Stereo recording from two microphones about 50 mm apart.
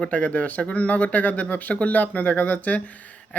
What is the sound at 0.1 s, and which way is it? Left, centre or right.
Speech, left.